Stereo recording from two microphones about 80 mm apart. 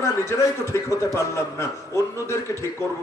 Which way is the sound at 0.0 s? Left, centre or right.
Left.